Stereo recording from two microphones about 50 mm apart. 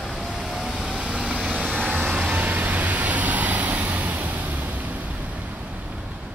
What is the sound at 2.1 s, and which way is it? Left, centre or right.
Vehicle, right.